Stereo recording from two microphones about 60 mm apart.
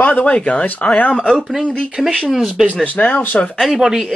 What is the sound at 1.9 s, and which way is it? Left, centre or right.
Speech, centre.